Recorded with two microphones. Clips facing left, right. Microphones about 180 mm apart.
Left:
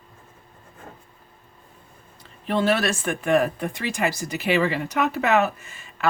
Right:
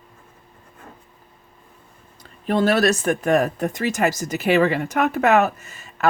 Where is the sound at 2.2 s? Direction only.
40° right (ahead or behind).